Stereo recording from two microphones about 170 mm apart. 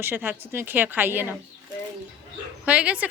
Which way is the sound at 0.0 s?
10° right (ahead or behind).